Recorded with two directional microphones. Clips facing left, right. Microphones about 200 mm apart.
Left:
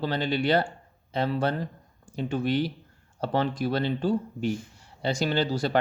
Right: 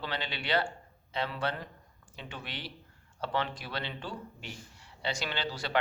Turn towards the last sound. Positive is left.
turn(degrees=45)  # may be behind; listen again after turning